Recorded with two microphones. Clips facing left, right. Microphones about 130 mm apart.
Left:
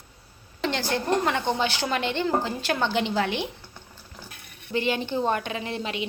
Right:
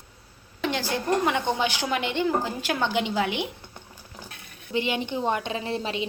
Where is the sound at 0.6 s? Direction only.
10° right (ahead or behind).